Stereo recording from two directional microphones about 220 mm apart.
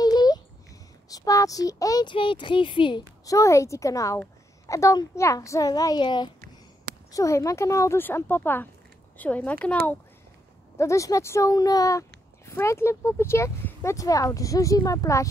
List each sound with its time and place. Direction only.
0.0 s a sound: 20° left (ahead or behind)
1.0 s speech: 15° left (ahead or behind)
10.8 s speech: 15° left (ahead or behind)